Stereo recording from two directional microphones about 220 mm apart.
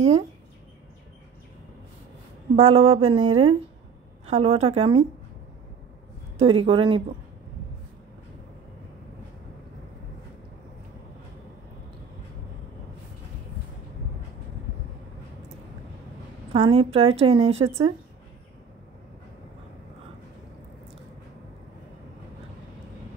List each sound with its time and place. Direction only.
2.5 s a woman's voice: 30° right (ahead or behind)
6.3 s a woman's voice: 25° right (ahead or behind)
16.5 s a woman's voice: 25° right (ahead or behind)